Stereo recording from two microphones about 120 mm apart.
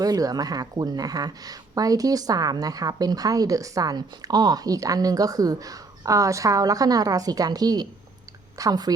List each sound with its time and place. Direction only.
0.0 s a woman's voice: 30° right (ahead or behind)